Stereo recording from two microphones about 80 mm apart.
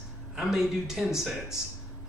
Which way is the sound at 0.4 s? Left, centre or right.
Centre.